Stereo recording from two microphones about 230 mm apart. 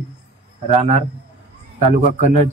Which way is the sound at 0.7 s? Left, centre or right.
Right.